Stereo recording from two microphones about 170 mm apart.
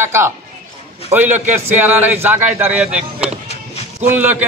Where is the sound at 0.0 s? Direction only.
15° right (ahead or behind).